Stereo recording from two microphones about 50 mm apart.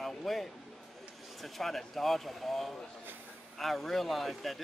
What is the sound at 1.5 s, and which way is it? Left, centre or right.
Speech, centre.